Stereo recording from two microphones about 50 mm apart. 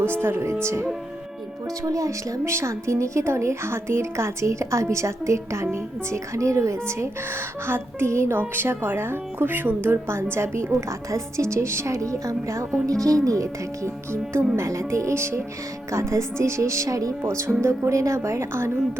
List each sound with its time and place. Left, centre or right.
0.0 s speech: right
8.4 s speech: right
10.8 s a woman's voice: right
15.9 s speech: right